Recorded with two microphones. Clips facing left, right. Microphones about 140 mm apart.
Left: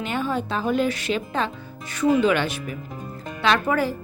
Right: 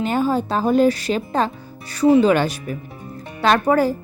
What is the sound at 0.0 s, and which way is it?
Speech, 40° right (ahead or behind).